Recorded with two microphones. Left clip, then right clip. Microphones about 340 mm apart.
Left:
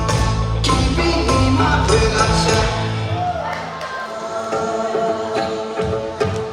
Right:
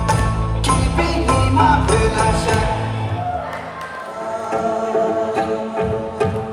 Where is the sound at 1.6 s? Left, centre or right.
Right.